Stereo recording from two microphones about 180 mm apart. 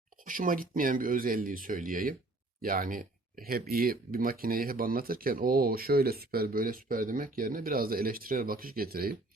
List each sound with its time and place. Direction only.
0.3 s speech: 50° right (ahead or behind)